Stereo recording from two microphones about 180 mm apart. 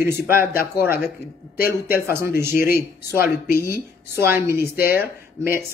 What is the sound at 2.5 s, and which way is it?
Speech, 55° left (ahead or behind).